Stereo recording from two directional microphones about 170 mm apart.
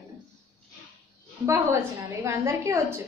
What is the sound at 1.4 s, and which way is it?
A woman's voice, 15° right (ahead or behind).